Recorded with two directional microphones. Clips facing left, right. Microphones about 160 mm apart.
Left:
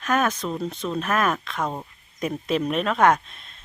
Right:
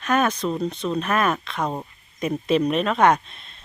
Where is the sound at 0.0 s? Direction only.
Centre (ahead or behind).